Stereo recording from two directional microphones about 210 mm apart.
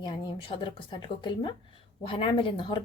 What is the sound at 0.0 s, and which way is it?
A woman's voice, 20° left (ahead or behind).